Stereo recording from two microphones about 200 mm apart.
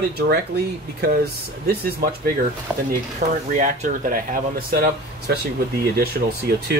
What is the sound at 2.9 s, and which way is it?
Speech, 40° right (ahead or behind).